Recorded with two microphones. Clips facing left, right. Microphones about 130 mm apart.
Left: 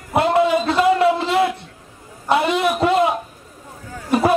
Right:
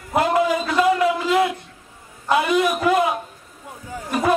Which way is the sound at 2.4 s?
30° left (ahead or behind).